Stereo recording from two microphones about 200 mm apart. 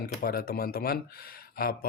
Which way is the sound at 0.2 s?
45° left (ahead or behind).